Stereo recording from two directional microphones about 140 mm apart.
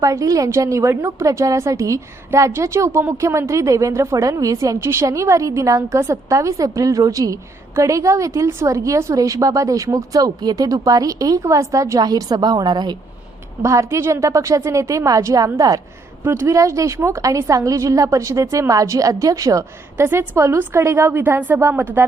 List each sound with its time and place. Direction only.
0.0 s a woman's voice: 25° right (ahead or behind)